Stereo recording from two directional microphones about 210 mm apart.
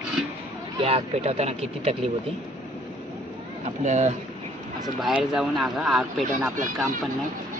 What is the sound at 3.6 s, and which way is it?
Speech, 35° right (ahead or behind).